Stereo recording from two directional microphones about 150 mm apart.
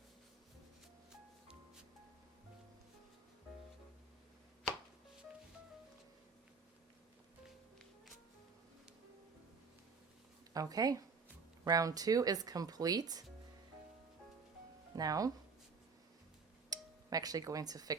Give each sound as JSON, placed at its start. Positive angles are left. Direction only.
{"t": 10.5, "sound": "speech", "side_deg": -25}
{"t": 14.9, "sound": "speech", "side_deg": -25}
{"t": 16.6, "sound": "speech", "side_deg": -25}